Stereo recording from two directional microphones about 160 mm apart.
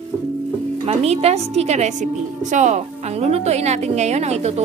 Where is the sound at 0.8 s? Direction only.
40° right (ahead or behind).